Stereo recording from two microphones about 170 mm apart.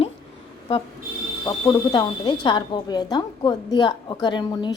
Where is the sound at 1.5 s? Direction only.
25° left (ahead or behind).